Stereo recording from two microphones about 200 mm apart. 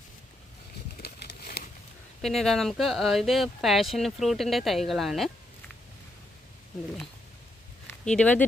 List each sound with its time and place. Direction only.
1.0 s a sound: 55° left (ahead or behind)
2.2 s speech: centre (ahead or behind)
7.9 s speech: 5° left (ahead or behind)